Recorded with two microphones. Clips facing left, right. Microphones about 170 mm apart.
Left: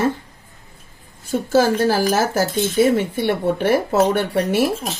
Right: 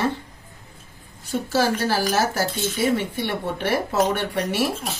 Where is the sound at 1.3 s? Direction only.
45° left (ahead or behind).